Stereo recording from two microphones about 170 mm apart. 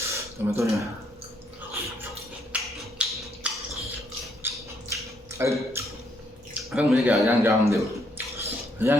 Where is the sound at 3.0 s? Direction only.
5° right (ahead or behind).